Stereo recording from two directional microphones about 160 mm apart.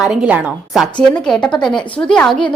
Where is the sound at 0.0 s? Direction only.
5° right (ahead or behind).